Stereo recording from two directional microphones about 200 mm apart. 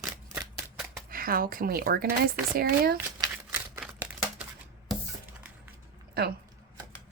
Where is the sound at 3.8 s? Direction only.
5° right (ahead or behind).